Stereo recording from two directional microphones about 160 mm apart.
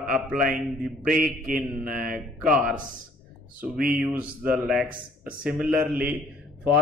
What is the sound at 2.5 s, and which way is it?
Speech, 5° right (ahead or behind).